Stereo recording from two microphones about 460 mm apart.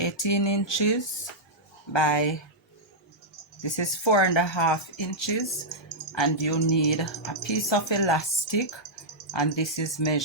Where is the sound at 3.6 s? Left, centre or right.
Left.